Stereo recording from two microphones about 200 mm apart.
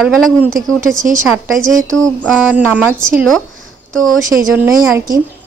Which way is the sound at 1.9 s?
Centre (ahead or behind).